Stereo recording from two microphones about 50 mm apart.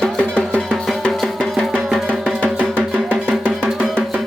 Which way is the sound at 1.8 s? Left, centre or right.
Centre.